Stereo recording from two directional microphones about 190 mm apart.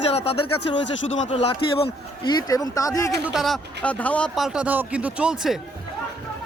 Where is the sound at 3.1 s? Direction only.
Centre (ahead or behind).